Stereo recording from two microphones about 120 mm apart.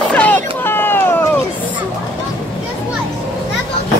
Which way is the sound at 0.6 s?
20° left (ahead or behind).